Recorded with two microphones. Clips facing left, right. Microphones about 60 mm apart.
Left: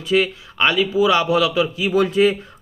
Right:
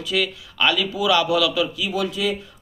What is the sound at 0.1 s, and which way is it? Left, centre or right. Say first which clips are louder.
A man's voice: left 6 dB; left.